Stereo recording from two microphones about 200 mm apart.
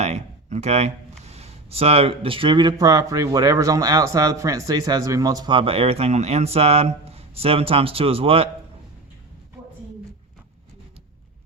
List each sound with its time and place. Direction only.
0.0 s speech: 35° right (ahead or behind)